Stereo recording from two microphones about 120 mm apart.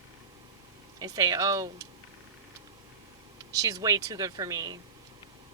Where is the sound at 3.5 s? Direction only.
30° right (ahead or behind).